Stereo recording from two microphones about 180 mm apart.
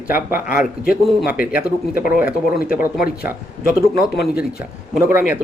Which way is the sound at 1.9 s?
55° left (ahead or behind).